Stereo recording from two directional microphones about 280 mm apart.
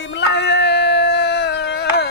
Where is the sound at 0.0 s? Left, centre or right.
Left.